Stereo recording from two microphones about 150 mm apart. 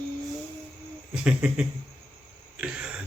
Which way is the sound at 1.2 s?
10° right (ahead or behind).